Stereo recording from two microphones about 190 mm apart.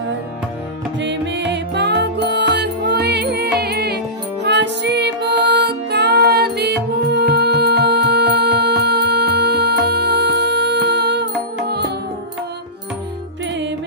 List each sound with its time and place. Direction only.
0.9 s music: 70° right (ahead or behind)